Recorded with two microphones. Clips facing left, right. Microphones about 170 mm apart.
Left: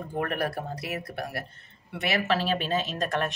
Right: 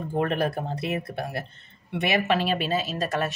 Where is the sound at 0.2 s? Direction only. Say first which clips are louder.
Right 4 dB; 25° right (ahead or behind).